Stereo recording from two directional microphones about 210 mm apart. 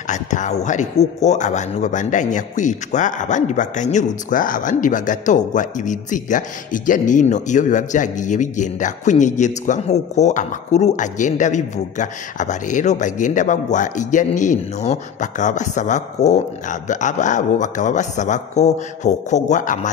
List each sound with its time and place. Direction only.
0.0 s speech: 35° left (ahead or behind)